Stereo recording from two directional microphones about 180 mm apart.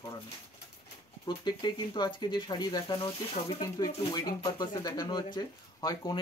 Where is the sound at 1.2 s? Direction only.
25° left (ahead or behind).